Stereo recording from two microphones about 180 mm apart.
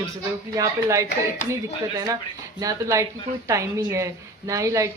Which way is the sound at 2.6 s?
20° right (ahead or behind).